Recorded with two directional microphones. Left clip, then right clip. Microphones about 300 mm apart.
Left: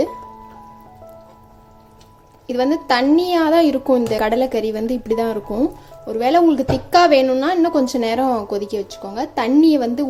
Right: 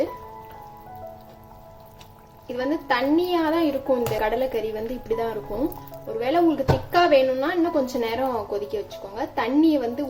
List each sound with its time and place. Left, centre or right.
2.5 s a woman's voice: left